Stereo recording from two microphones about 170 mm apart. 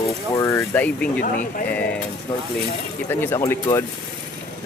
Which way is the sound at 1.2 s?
55° left (ahead or behind).